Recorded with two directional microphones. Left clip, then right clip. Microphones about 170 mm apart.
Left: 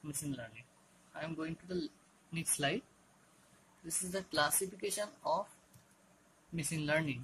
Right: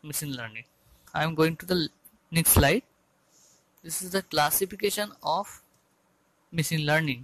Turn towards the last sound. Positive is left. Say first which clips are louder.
# right 9 dB
turn(degrees=-50)  # may be behind; listen again after turning